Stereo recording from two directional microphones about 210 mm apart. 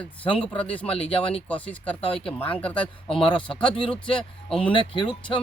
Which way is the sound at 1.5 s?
5° left (ahead or behind).